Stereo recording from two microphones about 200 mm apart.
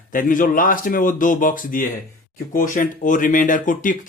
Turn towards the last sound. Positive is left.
turn(degrees=40)  # may be behind; listen again after turning